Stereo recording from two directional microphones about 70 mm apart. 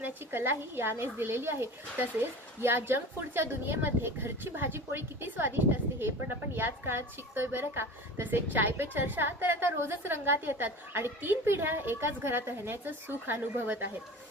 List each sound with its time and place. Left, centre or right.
0.0 s a woman's voice: right